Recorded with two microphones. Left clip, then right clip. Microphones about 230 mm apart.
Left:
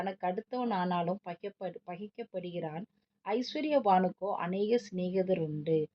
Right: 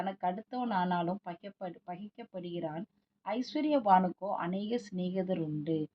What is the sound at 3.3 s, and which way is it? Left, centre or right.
A woman's voice, left.